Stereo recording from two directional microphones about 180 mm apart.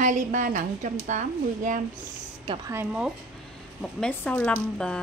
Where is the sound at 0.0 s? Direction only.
45° right (ahead or behind).